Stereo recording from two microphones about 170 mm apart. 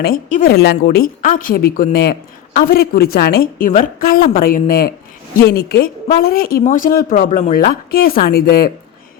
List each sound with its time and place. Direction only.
0.0 s speech: 55° left (ahead or behind)
0.4 s a woman's voice: 70° left (ahead or behind)
5.4 s a woman's voice: 70° left (ahead or behind)